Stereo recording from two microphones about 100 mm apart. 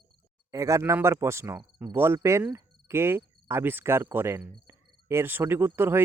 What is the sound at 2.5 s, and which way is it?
Cricket, 30° right (ahead or behind).